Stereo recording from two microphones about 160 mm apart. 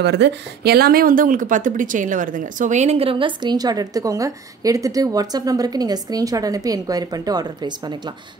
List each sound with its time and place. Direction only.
0.0 s speech: 90° right; by 7.9 s 25° right (ahead or behind)